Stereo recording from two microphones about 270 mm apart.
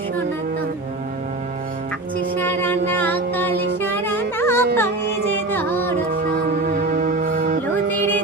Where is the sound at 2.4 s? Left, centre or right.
Centre.